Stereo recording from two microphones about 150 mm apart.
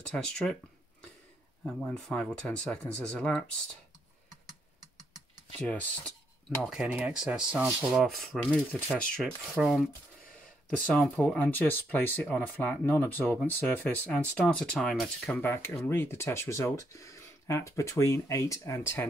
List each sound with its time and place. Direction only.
0.0 s speech: 5° left (ahead or behind)
1.8 s speech: 5° left (ahead or behind)
5.6 s speech: 10° left (ahead or behind)
6.6 s speech: 5° right (ahead or behind)
9.1 s speech: centre (ahead or behind)
10.9 s speech: 5° left (ahead or behind)
15.3 s speech: 15° left (ahead or behind)